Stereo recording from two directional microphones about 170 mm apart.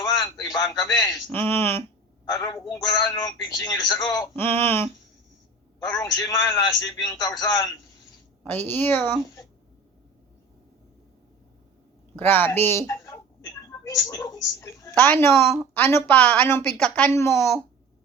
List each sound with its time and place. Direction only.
0.0 s a sound: 20° left (ahead or behind)
0.8 s a woman's voice: 20° left (ahead or behind)
8.4 s a woman's voice: 10° left (ahead or behind)
12.1 s a woman's voice: 10° left (ahead or behind)